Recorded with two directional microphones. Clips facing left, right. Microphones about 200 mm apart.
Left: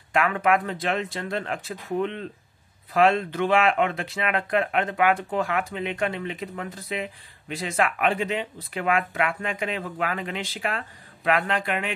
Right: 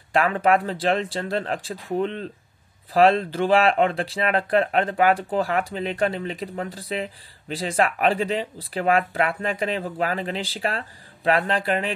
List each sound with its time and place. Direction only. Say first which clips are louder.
0.1 s speech: right 2 dB; 35° right (ahead or behind)